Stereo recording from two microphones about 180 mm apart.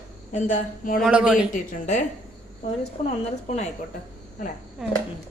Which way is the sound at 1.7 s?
40° left (ahead or behind).